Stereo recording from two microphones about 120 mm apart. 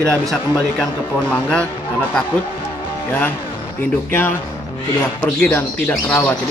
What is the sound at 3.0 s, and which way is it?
Speech, 15° left (ahead or behind).